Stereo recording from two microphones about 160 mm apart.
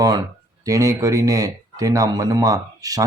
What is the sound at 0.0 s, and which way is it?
Speech, 20° right (ahead or behind).